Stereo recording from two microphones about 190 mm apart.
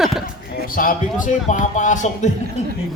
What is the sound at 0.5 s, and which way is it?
Speech, 50° left (ahead or behind).